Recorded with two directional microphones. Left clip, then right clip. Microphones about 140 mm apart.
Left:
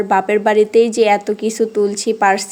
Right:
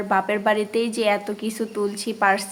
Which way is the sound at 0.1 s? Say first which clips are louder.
Left 6 dB; 35° left (ahead or behind).